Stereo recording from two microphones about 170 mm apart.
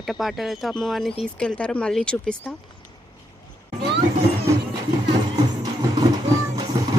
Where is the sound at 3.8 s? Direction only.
30° right (ahead or behind).